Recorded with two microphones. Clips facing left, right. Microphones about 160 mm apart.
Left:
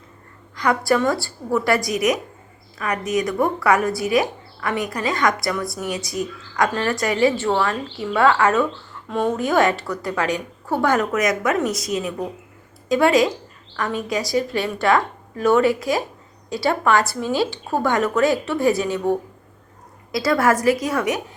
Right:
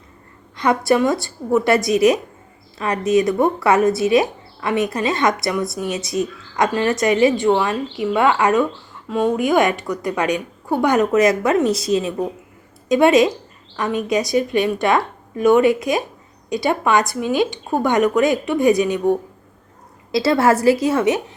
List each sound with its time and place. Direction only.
0.5 s speech: 25° right (ahead or behind)
20.1 s speech: 25° right (ahead or behind)